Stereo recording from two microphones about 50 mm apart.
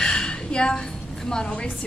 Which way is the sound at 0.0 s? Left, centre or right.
Centre.